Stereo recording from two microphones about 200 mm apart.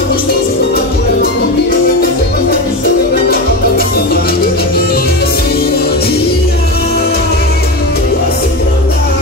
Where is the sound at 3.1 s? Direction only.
50° left (ahead or behind).